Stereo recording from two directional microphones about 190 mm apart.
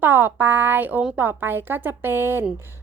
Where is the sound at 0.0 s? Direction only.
10° right (ahead or behind).